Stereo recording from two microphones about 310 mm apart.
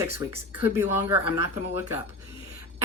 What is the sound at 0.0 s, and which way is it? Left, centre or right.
Speech, centre.